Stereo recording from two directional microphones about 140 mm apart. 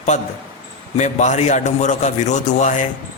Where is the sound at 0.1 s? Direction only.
55° left (ahead or behind).